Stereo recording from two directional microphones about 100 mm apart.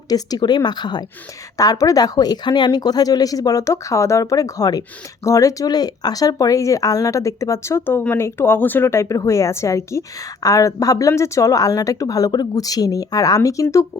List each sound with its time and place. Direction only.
0.1 s a woman's voice: 40° left (ahead or behind)